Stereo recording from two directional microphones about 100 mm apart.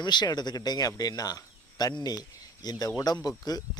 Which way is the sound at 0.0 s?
45° left (ahead or behind).